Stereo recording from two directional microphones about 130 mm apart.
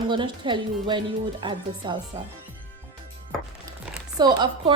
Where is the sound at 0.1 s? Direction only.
40° right (ahead or behind).